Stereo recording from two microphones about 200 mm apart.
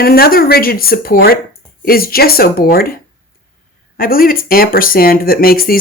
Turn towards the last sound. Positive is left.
turn(degrees=45)  # may be behind; listen again after turning